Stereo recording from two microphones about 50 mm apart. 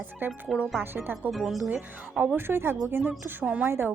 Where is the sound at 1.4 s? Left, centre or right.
Centre.